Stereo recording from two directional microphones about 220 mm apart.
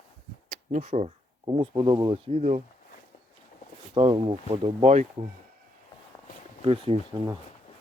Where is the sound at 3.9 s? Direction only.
25° right (ahead or behind).